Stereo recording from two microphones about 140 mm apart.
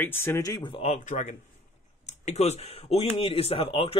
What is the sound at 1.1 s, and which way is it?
Speech, 60° left (ahead or behind).